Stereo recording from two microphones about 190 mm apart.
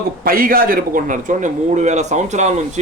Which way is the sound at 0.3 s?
50° right (ahead or behind).